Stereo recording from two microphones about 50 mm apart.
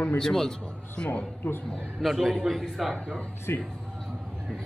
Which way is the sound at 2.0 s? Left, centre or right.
Centre.